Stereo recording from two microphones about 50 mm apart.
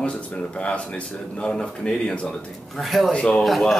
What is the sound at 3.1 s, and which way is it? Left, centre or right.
Speech, centre.